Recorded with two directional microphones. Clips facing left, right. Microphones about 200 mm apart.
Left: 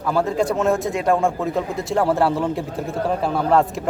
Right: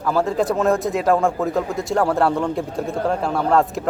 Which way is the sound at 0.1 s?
Centre (ahead or behind).